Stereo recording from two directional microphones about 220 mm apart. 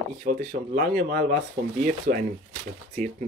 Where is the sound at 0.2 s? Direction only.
40° right (ahead or behind).